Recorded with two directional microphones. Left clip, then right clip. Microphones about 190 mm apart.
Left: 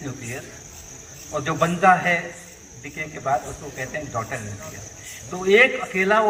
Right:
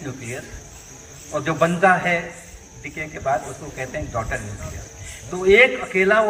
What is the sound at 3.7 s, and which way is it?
Speech, 25° right (ahead or behind).